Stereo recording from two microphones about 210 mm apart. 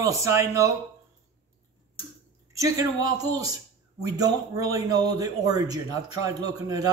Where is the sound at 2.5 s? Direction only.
15° right (ahead or behind).